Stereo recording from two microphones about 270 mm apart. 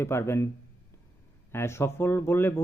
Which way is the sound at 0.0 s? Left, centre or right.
Centre.